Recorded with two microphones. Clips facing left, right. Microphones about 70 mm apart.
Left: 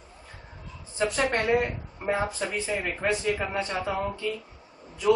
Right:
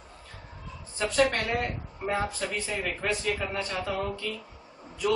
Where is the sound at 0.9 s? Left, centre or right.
Centre.